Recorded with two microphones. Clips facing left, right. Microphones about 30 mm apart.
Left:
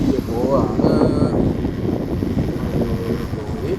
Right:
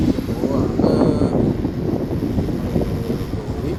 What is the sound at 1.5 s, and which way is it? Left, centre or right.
Vehicle, left.